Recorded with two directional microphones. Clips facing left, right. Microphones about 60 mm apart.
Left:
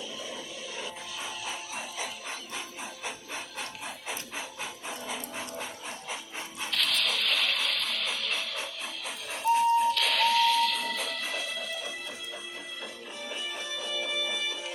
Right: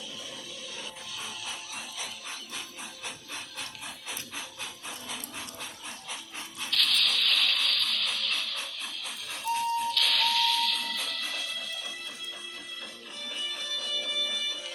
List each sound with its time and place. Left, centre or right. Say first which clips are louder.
1.2 s music: left 3 dB; left
3.0 s wood: left 3 dB; left
4.1 s a sound: left 3 dB; left
6.6 s music: right 1 dB; left
13.2 s music: left 1 dB; left